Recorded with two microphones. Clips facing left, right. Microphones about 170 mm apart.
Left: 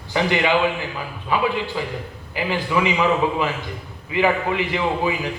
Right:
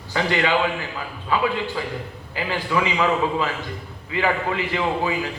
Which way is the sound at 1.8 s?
15° left (ahead or behind).